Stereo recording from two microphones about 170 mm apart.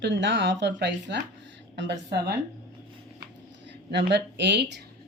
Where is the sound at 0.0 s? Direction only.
90° right.